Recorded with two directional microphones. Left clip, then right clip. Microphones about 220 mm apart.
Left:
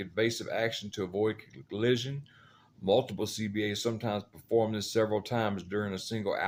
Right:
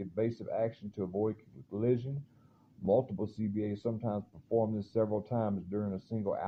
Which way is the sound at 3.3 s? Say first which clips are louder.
Left 5 dB; 10° left (ahead or behind).